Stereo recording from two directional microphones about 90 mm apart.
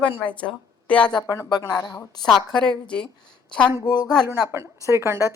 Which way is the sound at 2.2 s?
10° left (ahead or behind).